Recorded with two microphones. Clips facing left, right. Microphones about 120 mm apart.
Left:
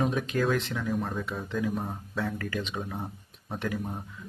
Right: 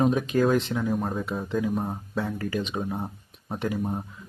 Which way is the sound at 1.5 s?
5° right (ahead or behind).